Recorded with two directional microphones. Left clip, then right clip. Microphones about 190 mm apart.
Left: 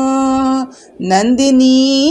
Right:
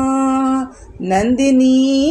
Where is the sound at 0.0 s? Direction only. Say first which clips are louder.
Left 2 dB; 25° left (ahead or behind).